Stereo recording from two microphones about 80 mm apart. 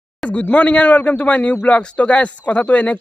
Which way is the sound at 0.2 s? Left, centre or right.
Centre.